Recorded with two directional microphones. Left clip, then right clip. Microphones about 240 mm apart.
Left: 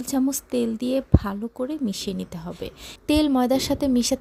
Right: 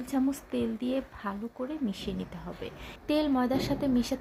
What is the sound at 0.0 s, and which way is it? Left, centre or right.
A woman's voice, left.